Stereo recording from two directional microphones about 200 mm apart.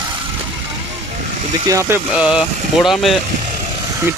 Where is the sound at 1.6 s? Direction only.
15° right (ahead or behind).